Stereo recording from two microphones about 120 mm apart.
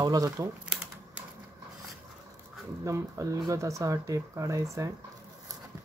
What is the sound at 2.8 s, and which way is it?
Speech, 25° right (ahead or behind).